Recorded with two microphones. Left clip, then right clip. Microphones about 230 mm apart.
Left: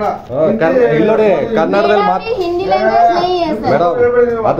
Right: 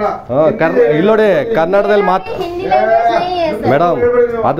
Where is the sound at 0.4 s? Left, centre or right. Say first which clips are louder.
Even; right.